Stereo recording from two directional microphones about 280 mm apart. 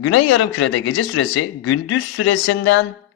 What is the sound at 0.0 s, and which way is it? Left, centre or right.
Speech, left.